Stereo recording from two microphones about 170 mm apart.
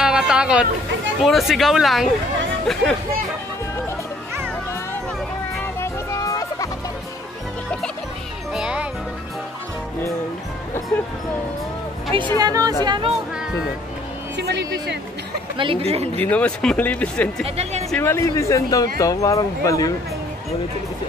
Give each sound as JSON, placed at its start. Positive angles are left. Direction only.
{"t": 0.0, "sound": "a sound", "side_deg": -5}
{"t": 1.2, "sound": "speech", "side_deg": 0}
{"t": 5.8, "sound": "music", "side_deg": 20}
{"t": 8.5, "sound": "music", "side_deg": -5}
{"t": 10.9, "sound": "speech", "side_deg": 10}
{"t": 12.4, "sound": "a woman's voice", "side_deg": -20}
{"t": 14.3, "sound": "speech", "side_deg": -80}
{"t": 15.5, "sound": "speech", "side_deg": -30}
{"t": 16.2, "sound": "speech", "side_deg": 10}